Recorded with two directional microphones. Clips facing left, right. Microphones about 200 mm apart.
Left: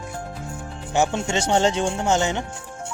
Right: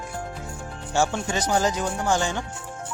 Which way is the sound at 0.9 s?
20° left (ahead or behind).